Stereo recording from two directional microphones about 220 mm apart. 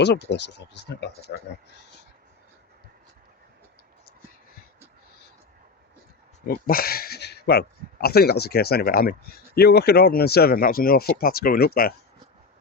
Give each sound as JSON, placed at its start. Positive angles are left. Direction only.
{"t": 0.0, "sound": "speech", "side_deg": 50}
{"t": 6.5, "sound": "speech", "side_deg": 45}